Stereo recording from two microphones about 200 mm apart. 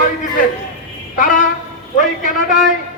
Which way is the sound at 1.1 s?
40° left (ahead or behind).